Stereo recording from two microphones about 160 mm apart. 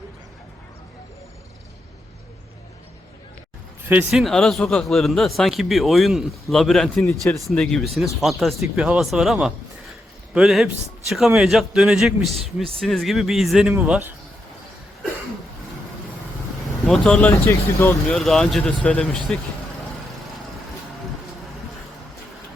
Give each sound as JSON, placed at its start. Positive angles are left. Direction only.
{"t": 3.8, "sound": "speech", "side_deg": -5}
{"t": 16.8, "sound": "speech", "side_deg": 0}